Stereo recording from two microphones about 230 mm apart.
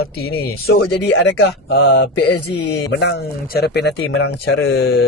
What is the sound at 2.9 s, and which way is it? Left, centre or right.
A man's voice, left.